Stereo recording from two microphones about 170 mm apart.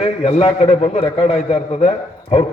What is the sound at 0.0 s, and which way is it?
A man's voice, 40° left (ahead or behind).